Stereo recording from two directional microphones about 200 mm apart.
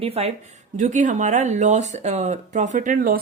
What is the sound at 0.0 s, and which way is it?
A woman's voice, 30° right (ahead or behind).